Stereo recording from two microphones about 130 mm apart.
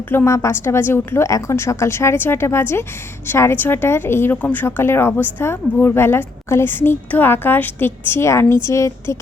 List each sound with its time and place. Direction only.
0.1 s a woman's voice: 20° left (ahead or behind)